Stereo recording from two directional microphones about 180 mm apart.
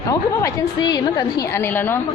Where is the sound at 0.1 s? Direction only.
20° left (ahead or behind).